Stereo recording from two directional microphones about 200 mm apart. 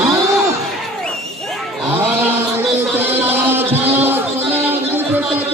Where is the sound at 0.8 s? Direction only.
Centre (ahead or behind).